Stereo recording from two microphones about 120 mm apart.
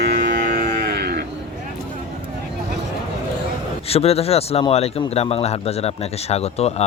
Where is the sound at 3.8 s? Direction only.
55° left (ahead or behind).